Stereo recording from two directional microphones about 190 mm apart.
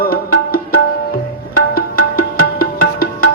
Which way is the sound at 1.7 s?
50° left (ahead or behind).